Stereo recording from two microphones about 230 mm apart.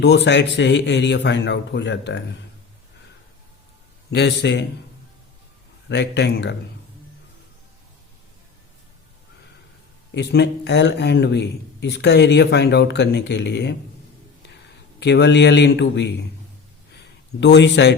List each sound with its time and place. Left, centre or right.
0.0 s speech: left
4.1 s speech: left
5.9 s speech: left
10.2 s speech: left
14.9 s speech: left
17.4 s speech: left